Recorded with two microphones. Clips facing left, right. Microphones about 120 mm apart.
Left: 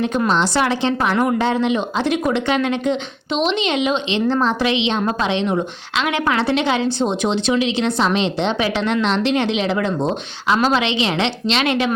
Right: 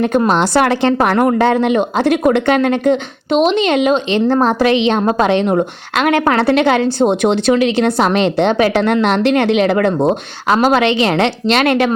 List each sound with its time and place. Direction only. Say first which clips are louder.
0.3 s a woman's voice: right 5 dB; 50° right (ahead or behind)